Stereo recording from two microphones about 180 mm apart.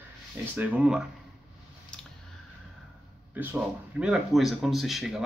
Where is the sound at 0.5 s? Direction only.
5° right (ahead or behind).